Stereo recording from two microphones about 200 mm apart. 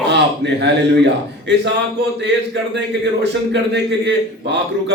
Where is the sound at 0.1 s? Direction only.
60° right (ahead or behind).